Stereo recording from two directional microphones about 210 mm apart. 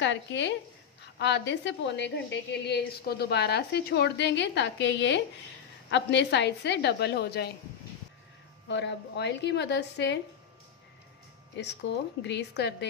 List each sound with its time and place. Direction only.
0.0 s a woman's voice: 60° left (ahead or behind)
8.6 s a woman's voice: 55° left (ahead or behind)
11.5 s a woman's voice: 55° left (ahead or behind)